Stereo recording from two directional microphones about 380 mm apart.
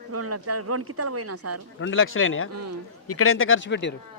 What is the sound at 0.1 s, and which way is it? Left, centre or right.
Speech, right.